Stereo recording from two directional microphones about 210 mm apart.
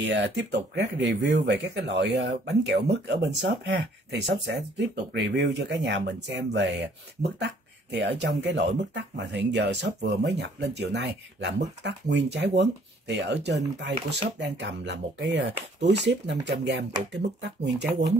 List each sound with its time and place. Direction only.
0.0 s speech: 55° right (ahead or behind)